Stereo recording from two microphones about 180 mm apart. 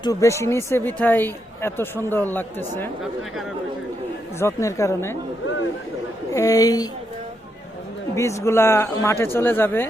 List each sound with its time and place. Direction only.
0.0 s speech: 20° left (ahead or behind)
4.4 s speech: 15° left (ahead or behind)
6.3 s a woman's voice: 20° left (ahead or behind)
8.1 s speech: 15° left (ahead or behind)